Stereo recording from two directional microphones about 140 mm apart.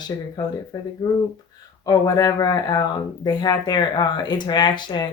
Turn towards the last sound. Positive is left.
turn(degrees=35)  # may be behind; listen again after turning